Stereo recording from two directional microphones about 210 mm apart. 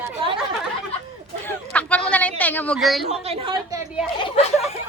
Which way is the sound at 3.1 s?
30° right (ahead or behind).